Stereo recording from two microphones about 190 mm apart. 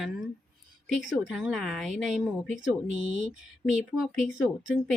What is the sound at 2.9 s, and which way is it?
Speech, 40° right (ahead or behind).